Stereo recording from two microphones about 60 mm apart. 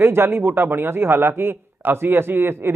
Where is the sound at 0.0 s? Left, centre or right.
Right.